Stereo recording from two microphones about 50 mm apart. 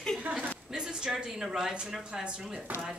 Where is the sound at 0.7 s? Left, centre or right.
Centre.